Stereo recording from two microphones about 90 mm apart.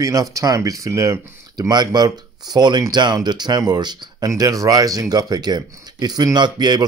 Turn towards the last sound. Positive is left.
turn(degrees=-55)  # may be behind; listen again after turning